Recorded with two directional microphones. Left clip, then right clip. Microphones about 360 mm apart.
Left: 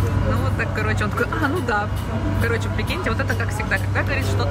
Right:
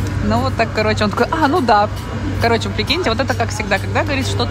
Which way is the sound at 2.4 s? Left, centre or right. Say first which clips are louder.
Right 10 dB; centre.